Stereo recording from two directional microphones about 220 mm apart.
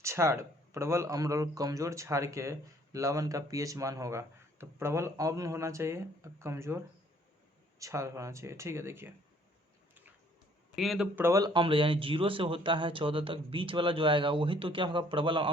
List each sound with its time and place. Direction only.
0.0 s speech: 15° right (ahead or behind)
10.8 s a man's voice: centre (ahead or behind); by 15.4 s 25° right (ahead or behind)